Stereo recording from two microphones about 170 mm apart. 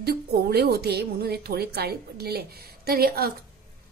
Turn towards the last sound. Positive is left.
turn(degrees=-65)  # may be behind; listen again after turning